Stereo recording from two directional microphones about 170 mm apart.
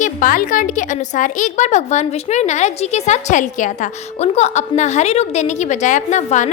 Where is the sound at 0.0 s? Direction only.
55° left (ahead or behind).